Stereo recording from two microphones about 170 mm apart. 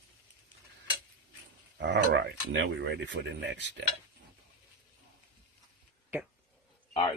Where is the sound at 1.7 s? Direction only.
90° right.